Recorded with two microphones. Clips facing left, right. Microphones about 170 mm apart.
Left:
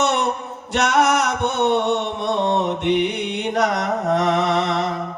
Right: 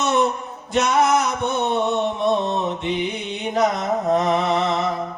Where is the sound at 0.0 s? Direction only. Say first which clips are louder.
Right 1 dB; 70° left (ahead or behind).